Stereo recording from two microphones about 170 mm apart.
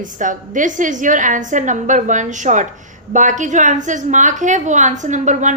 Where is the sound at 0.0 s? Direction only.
50° right (ahead or behind).